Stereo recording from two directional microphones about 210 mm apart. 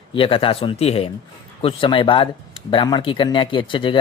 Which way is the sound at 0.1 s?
25° left (ahead or behind).